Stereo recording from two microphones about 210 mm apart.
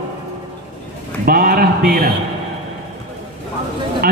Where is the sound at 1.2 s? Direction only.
45° right (ahead or behind).